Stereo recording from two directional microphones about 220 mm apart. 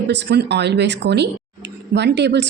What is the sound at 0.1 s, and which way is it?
A woman's voice, 50° right (ahead or behind).